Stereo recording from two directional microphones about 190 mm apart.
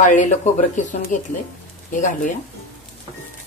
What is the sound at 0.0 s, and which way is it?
Speech, 40° left (ahead or behind).